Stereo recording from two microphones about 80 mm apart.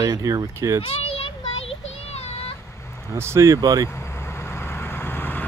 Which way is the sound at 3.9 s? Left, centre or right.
Left.